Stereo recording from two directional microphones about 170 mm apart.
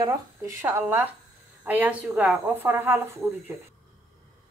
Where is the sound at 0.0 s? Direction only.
15° right (ahead or behind).